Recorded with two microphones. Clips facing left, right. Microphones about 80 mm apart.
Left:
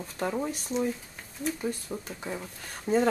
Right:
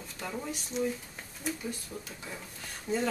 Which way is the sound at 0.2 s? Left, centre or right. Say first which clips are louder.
Left 8 dB; left.